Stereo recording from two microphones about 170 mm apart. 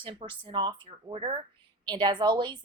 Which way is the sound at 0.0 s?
30° right (ahead or behind).